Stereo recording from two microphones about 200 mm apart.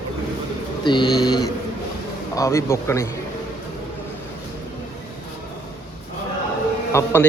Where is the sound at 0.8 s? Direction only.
25° left (ahead or behind).